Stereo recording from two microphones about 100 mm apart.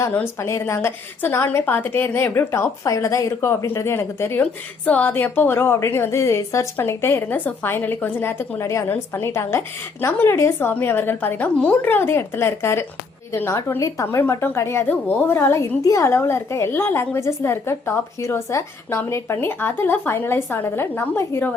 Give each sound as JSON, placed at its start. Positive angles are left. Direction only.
{"t": 0.3, "sound": "a woman's voice", "side_deg": 30}
{"t": 15.8, "sound": "a woman's voice", "side_deg": 35}